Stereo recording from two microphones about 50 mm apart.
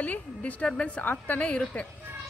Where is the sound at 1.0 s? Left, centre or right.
Left.